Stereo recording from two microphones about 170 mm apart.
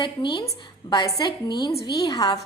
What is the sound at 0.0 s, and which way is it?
A woman's voice, 30° left (ahead or behind).